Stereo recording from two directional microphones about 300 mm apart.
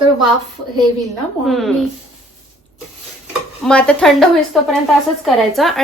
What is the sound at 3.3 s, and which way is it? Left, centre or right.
Stir, centre.